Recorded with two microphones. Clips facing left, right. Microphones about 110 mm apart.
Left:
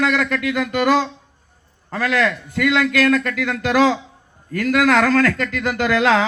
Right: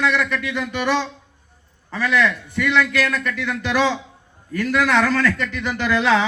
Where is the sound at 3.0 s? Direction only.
50° left (ahead or behind).